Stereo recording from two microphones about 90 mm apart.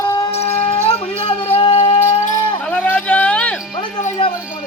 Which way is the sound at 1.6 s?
75° left (ahead or behind).